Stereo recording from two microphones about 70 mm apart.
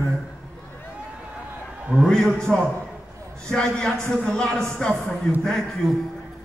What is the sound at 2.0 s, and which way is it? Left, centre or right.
A man's voice, centre.